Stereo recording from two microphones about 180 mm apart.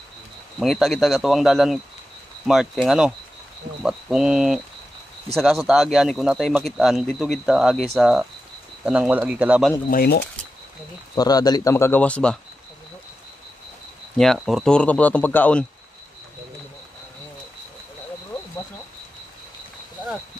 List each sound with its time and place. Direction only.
0.6 s speech: centre (ahead or behind)
9.8 s speech: 55° left (ahead or behind)
11.1 s speech: 20° left (ahead or behind)
14.1 s speech: centre (ahead or behind)